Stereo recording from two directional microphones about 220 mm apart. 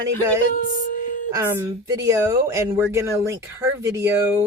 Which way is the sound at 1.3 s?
10° right (ahead or behind).